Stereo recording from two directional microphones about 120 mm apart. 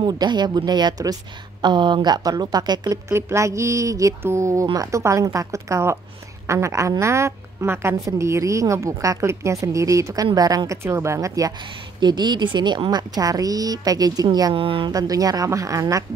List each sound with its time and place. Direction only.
0.0 s a woman's voice: 40° right (ahead or behind)
3.1 s a woman's voice: 20° right (ahead or behind)
14.5 s a woman's voice: 45° right (ahead or behind)
14.9 s a woman's voice: 30° right (ahead or behind)